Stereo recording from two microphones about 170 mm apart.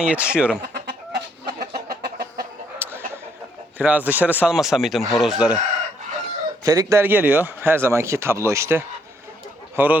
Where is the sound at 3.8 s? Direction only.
10° right (ahead or behind).